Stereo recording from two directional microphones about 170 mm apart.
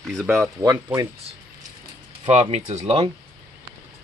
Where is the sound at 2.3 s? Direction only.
40° right (ahead or behind).